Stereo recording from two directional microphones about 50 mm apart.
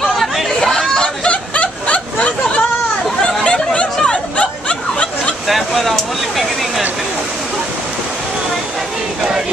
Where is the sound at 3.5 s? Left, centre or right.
Left.